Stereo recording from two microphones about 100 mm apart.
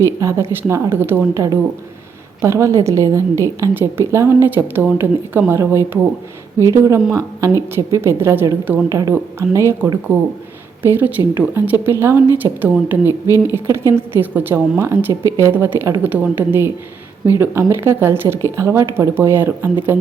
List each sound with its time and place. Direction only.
0.0 s a woman's voice: 30° right (ahead or behind)
1.3 s a woman's voice: 35° right (ahead or behind); by 8.8 s 20° right (ahead or behind)
8.9 s a woman's voice: 35° right (ahead or behind)